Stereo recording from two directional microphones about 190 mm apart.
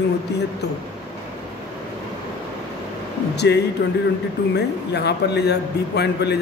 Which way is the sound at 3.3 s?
60° left (ahead or behind).